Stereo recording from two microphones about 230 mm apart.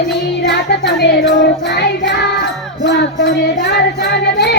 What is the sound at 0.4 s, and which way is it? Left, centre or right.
Music, left.